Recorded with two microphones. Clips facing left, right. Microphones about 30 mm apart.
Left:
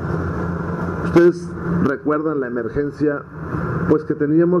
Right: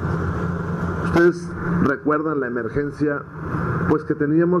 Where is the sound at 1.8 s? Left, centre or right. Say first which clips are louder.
Left 1 dB; centre.